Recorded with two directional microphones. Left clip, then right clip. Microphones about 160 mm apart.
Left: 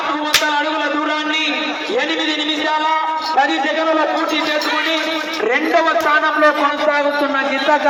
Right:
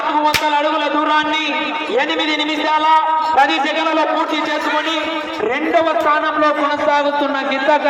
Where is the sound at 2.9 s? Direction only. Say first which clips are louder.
Right 4 dB; 15° right (ahead or behind).